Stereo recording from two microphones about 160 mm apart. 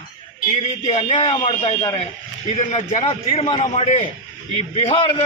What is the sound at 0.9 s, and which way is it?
A man's voice, 40° left (ahead or behind).